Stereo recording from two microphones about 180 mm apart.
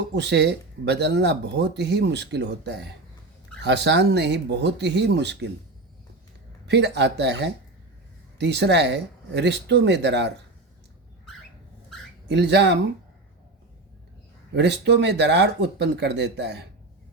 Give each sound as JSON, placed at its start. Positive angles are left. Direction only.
{"t": 0.1, "sound": "speech", "side_deg": -75}
{"t": 6.7, "sound": "speech", "side_deg": -70}
{"t": 12.3, "sound": "speech", "side_deg": -75}
{"t": 14.5, "sound": "speech", "side_deg": -70}